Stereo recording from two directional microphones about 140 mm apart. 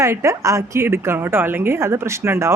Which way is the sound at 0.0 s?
20° right (ahead or behind).